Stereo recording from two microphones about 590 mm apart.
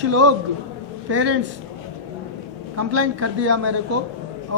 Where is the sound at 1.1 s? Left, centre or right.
Centre.